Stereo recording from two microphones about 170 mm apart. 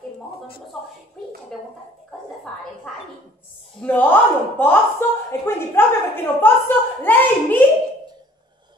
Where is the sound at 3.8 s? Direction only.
10° left (ahead or behind).